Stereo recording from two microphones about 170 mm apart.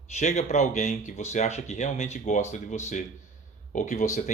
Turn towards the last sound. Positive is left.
turn(degrees=45)  # may be behind; listen again after turning